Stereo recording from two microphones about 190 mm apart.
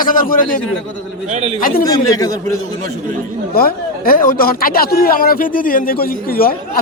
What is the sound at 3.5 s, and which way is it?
Speech, 50° left (ahead or behind).